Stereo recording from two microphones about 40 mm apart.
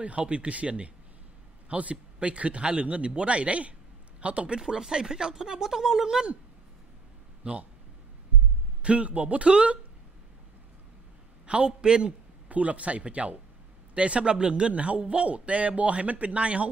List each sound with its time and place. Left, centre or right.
0.0 s a man's voice: right
4.6 s speech: centre
7.4 s a man's voice: right
8.8 s a man's voice: right
11.4 s a man's voice: right
12.4 s a man's voice: right